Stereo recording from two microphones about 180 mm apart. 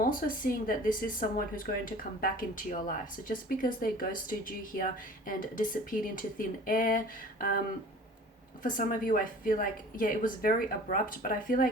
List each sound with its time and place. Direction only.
0.0 s speech: 50° left (ahead or behind)
8.6 s speech: 50° left (ahead or behind)